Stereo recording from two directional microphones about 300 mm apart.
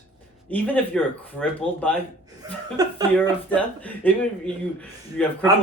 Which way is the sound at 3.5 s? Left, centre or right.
Centre.